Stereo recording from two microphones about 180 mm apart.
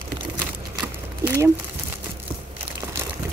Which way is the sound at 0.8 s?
10° right (ahead or behind).